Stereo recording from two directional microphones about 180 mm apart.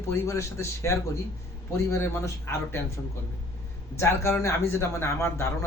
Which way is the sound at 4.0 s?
15° left (ahead or behind).